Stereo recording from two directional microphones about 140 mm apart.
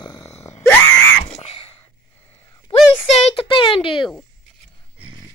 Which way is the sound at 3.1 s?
45° left (ahead or behind).